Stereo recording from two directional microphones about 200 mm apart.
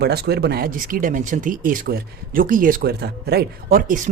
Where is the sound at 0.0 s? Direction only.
55° right (ahead or behind).